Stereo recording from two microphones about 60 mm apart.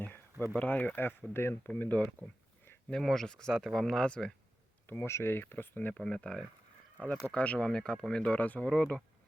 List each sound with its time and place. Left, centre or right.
0.6 s speech: left
1.3 s speech: left
1.6 s speech: left
2.9 s speech: centre
4.9 s speech: left
5.9 s speech: centre